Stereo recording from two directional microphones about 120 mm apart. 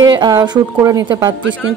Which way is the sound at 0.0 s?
35° right (ahead or behind).